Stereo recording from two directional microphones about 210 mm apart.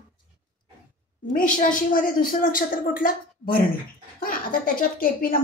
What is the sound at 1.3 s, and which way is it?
A woman's voice, 40° left (ahead or behind).